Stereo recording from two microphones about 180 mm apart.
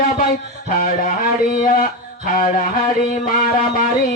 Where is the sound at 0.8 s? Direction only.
50° left (ahead or behind).